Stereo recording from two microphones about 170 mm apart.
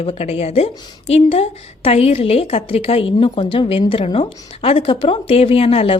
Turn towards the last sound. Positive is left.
turn(degrees=35)  # may be behind; listen again after turning